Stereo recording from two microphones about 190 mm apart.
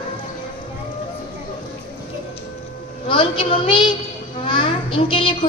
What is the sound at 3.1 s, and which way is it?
A child's voice, 25° left (ahead or behind).